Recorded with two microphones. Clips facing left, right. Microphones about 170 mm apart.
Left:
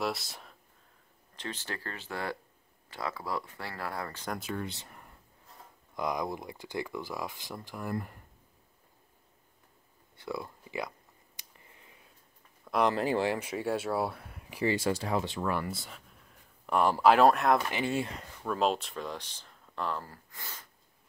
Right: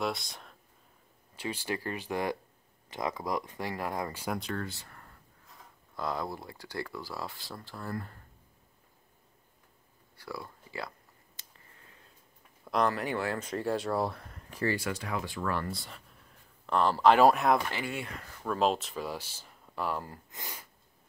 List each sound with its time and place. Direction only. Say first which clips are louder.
0.0 s speech: even; centre (ahead or behind)
1.3 s speech: right 5 dB; 10° right (ahead or behind)
4.4 s speech: even; 5° left (ahead or behind)
4.6 s speech: left 1 dB; 20° left (ahead or behind)
10.1 s speech: left 4 dB; 20° left (ahead or behind)
11.3 s a sound: left 2 dB; 15° left (ahead or behind)
12.9 s speech: left 4 dB; 30° left (ahead or behind)
13.3 s speech: even; 10° left (ahead or behind)
14.8 s speech: left 5 dB; 25° left (ahead or behind)
15.7 s a sound: even; centre (ahead or behind)
16.7 s speech: even; 10° left (ahead or behind)
17.6 s speech: left 5 dB; 20° left (ahead or behind)
18.4 s speech: right 1 dB; centre (ahead or behind)
20.1 s speech: right 3 dB; 20° right (ahead or behind)